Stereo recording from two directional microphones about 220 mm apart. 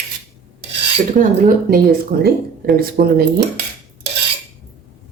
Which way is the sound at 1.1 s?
40° right (ahead or behind).